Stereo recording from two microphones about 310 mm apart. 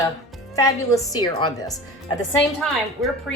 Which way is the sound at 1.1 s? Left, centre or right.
Centre.